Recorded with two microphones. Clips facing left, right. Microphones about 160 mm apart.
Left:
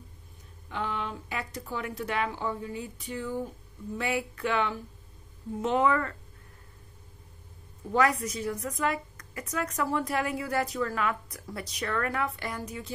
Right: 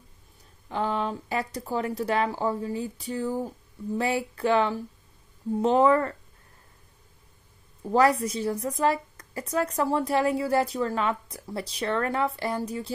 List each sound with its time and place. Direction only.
0.7 s a woman's voice: 35° right (ahead or behind)
7.9 s a woman's voice: 30° right (ahead or behind)